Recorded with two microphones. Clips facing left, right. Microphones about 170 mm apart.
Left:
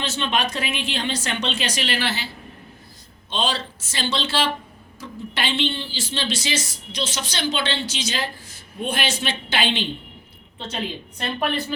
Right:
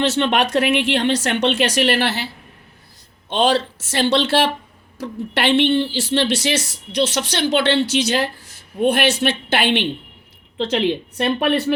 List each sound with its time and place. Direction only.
0.0 s speech: 75° right (ahead or behind)
10.6 s speech: 90° right; by 11.7 s 70° right (ahead or behind)